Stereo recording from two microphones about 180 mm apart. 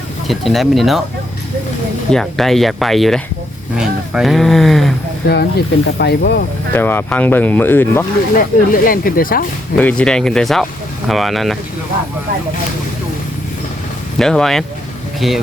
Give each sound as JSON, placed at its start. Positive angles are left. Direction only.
{"t": 0.3, "sound": "speech", "side_deg": 0}
{"t": 2.1, "sound": "speech", "side_deg": 0}
{"t": 5.3, "sound": "speech", "side_deg": 60}
{"t": 6.7, "sound": "speech", "side_deg": 10}
{"t": 8.4, "sound": "speech", "side_deg": 50}
{"t": 9.7, "sound": "speech", "side_deg": 5}
{"t": 14.2, "sound": "speech", "side_deg": 5}